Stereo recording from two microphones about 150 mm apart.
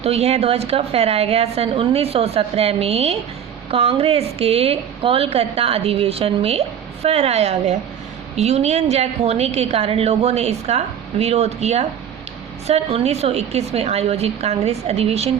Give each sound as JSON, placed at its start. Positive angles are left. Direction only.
{"t": 0.0, "sound": "a woman's voice", "side_deg": -45}